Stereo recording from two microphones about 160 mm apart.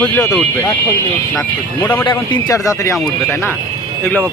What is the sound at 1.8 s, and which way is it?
Speech, 15° left (ahead or behind).